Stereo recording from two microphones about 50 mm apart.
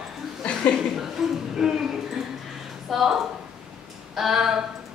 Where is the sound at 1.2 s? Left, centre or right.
Centre.